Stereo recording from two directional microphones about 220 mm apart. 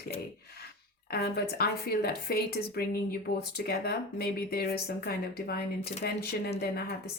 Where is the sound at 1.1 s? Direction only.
45° left (ahead or behind).